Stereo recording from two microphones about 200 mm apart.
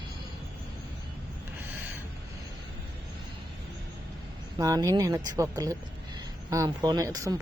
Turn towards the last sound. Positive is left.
turn(degrees=-15)  # may be behind; listen again after turning